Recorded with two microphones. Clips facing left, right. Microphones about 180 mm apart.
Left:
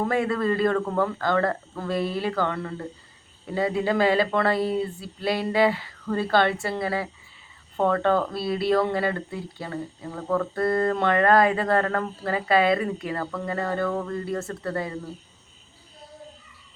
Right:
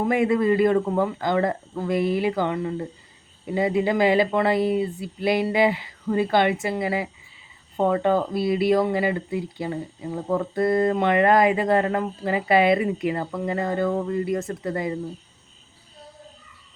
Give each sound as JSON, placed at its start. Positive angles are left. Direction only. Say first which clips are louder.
{"t": 0.0, "sound": "speech", "louder": "right 3 dB", "side_deg": -15}